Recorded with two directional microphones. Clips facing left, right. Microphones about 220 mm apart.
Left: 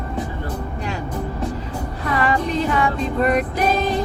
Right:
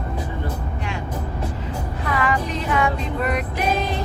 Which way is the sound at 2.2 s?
35° left (ahead or behind).